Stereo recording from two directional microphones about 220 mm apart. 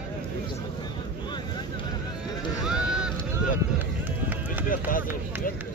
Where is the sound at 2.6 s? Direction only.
5° right (ahead or behind).